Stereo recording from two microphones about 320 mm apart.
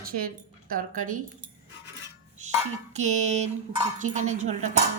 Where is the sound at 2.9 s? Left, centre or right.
Right.